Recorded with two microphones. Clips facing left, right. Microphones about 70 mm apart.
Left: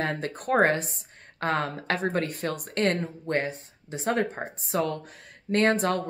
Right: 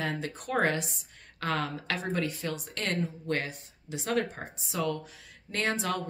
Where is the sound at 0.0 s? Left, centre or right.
Left.